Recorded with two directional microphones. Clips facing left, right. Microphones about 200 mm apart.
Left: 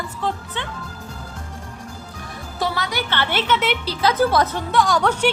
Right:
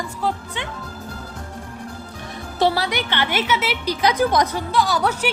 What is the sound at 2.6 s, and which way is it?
Speech, 30° right (ahead or behind).